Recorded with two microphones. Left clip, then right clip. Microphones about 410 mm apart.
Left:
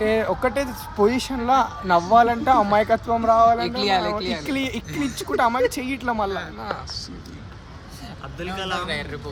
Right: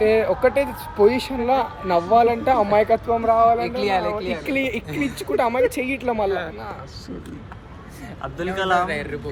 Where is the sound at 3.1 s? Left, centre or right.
Centre.